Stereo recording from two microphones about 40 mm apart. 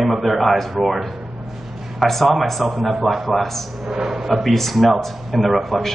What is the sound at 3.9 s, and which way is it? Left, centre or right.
Speech, centre.